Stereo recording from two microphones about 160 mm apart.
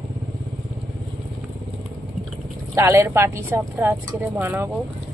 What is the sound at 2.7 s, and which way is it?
A woman's voice, 15° right (ahead or behind).